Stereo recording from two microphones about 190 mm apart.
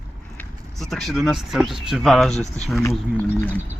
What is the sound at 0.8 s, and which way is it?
Speech, centre (ahead or behind).